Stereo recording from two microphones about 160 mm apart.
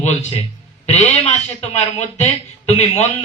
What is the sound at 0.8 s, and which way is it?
A man's voice, 45° left (ahead or behind).